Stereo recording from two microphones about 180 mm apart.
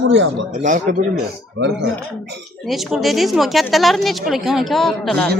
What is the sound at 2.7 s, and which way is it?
Speech, centre (ahead or behind).